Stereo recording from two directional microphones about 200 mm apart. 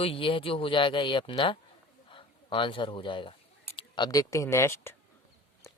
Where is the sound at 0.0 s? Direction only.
25° left (ahead or behind).